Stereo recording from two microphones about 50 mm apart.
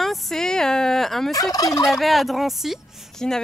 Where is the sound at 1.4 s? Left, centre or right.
Left.